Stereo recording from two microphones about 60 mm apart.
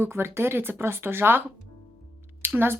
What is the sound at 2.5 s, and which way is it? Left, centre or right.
Speech, right.